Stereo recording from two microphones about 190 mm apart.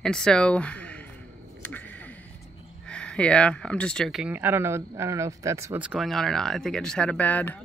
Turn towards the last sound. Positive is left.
turn(degrees=10)  # may be behind; listen again after turning